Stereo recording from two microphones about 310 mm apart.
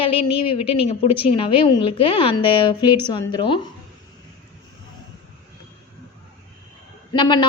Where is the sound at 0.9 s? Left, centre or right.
Centre.